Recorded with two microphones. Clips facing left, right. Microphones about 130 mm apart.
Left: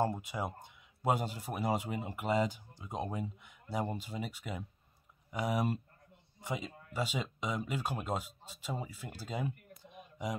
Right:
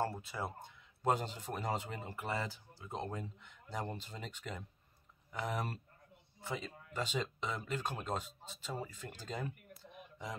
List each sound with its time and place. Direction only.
0.0 s speech: 15° left (ahead or behind)